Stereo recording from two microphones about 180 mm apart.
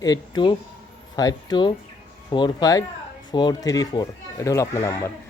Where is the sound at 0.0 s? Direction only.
25° left (ahead or behind).